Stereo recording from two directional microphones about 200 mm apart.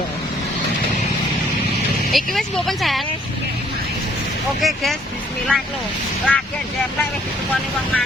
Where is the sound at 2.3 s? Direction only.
Centre (ahead or behind).